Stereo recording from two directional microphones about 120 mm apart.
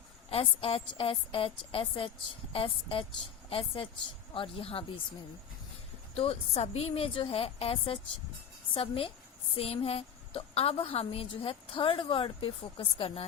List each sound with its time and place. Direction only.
0.3 s a woman's voice: 55° left (ahead or behind)
6.1 s a woman's voice: 55° left (ahead or behind)